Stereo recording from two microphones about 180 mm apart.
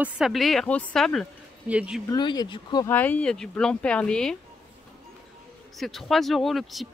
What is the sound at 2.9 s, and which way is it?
Speech, 10° left (ahead or behind).